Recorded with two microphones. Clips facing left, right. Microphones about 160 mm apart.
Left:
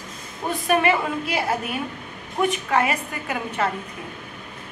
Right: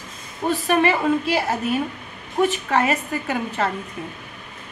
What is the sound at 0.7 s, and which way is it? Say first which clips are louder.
A woman's voice: right 1 dB; 30° right (ahead or behind).